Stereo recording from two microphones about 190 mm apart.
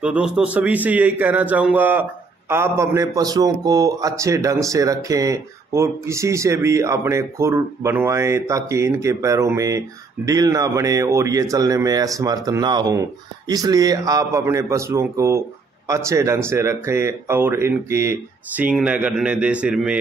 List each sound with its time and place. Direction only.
0.0 s a man's voice: 5° right (ahead or behind)